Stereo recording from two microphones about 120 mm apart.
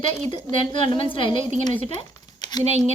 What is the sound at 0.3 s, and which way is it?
A woman's voice, 40° left (ahead or behind).